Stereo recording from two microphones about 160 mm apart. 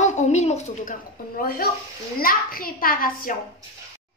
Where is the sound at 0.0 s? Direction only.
45° left (ahead or behind).